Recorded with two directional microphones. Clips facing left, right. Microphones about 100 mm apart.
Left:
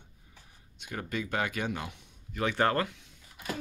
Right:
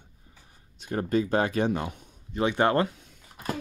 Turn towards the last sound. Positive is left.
turn(degrees=-40)  # may be behind; listen again after turning